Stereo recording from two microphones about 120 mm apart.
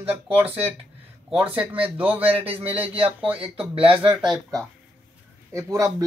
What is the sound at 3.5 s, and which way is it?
Speech, 50° right (ahead or behind).